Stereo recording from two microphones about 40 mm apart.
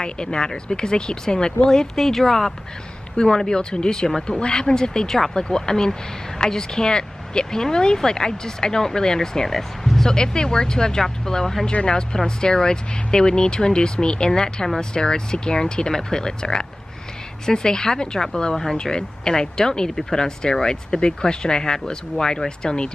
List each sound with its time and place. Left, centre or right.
0.0 s speech: centre
2.0 s speech: centre
10.1 s speech: centre